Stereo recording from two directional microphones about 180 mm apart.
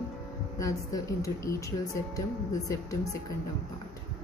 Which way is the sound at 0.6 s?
20° left (ahead or behind).